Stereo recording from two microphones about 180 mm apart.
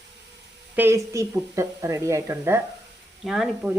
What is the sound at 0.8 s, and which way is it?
Speech, 15° right (ahead or behind).